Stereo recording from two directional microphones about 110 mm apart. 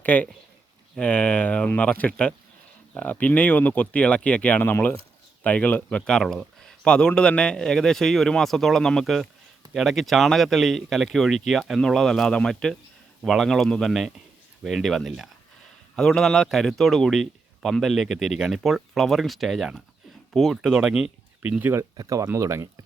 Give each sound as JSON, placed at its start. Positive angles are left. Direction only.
{"t": 0.0, "sound": "a man's voice", "side_deg": 15}
{"t": 21.6, "sound": "speech", "side_deg": -20}
{"t": 21.9, "sound": "speech", "side_deg": -30}